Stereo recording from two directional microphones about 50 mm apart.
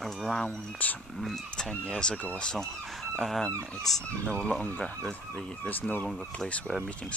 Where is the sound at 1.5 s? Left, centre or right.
Centre.